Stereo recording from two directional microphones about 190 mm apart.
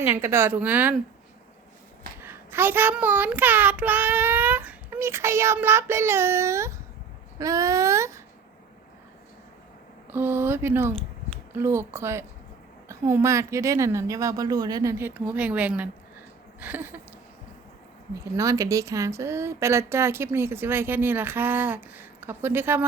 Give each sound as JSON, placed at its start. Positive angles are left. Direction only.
{"t": 0.0, "sound": "speech", "side_deg": -15}
{"t": 2.2, "sound": "speech", "side_deg": -10}
{"t": 10.1, "sound": "speech", "side_deg": -10}
{"t": 18.1, "sound": "speech", "side_deg": -15}